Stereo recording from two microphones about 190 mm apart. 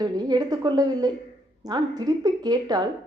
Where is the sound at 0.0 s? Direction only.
20° right (ahead or behind).